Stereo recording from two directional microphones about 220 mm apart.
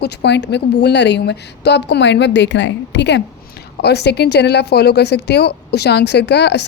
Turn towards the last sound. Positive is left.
turn(degrees=50)  # may be behind; listen again after turning